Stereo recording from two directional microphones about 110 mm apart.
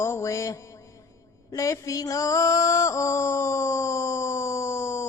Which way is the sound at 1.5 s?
30° left (ahead or behind).